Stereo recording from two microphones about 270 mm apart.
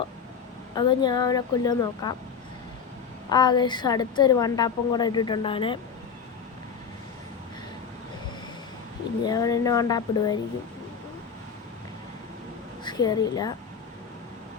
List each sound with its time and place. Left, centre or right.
0.7 s a woman's voice: centre
3.2 s a woman's voice: centre
9.2 s a woman's voice: centre
12.8 s a woman's voice: centre